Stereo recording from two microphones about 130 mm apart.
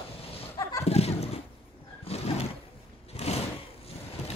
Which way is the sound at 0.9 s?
50° left (ahead or behind).